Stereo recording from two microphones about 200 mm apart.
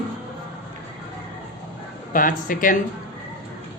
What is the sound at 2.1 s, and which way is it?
Speech, 45° left (ahead or behind).